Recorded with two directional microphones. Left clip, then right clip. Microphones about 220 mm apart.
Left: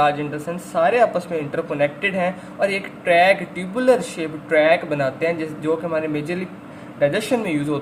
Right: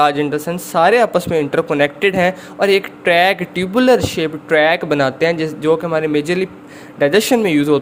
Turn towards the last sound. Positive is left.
turn(degrees=-40)  # may be behind; listen again after turning